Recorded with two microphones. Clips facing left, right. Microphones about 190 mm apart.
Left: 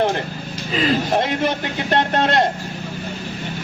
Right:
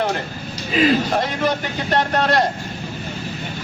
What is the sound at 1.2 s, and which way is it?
A man's voice, 25° left (ahead or behind).